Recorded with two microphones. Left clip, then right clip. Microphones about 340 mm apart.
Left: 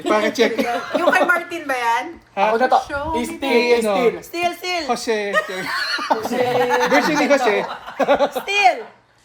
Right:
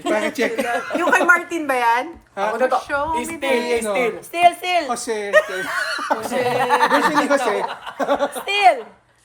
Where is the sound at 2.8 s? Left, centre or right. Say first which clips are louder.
Right 3 dB; right.